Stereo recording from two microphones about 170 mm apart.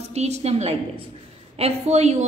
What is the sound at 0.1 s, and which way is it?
Speech, 40° right (ahead or behind).